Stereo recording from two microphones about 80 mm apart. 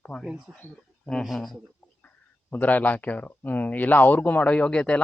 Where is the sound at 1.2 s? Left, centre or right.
Centre.